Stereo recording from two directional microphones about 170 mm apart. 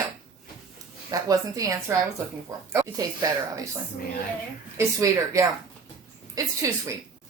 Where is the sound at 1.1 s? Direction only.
20° right (ahead or behind).